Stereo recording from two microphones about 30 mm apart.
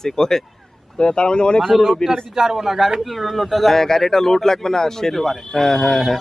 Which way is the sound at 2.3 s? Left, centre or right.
Centre.